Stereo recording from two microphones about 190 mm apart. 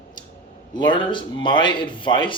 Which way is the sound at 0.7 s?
25° left (ahead or behind).